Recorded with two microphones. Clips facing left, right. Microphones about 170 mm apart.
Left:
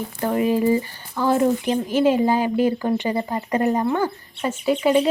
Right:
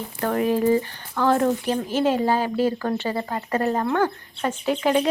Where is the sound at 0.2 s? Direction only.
10° left (ahead or behind).